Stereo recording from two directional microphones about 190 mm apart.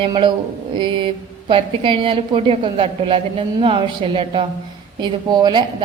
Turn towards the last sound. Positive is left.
turn(degrees=-25)  # may be behind; listen again after turning